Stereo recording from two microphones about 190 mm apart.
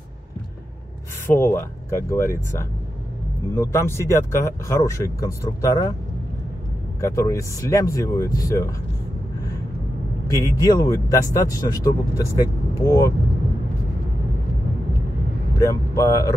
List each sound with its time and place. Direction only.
1.2 s speech: 15° left (ahead or behind)
7.0 s speech: 15° left (ahead or behind)
10.3 s speech: 20° left (ahead or behind)
15.6 s speech: 15° left (ahead or behind)